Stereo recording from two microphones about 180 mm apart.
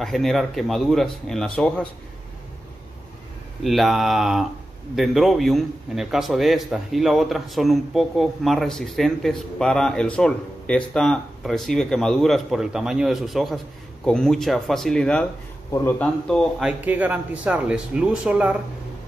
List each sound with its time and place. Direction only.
0.0 s a man's voice: centre (ahead or behind)
3.6 s a man's voice: centre (ahead or behind)
16.3 s speech: centre (ahead or behind)